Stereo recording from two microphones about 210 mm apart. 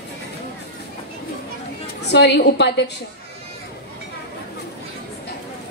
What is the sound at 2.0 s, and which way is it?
Speech, 55° left (ahead or behind).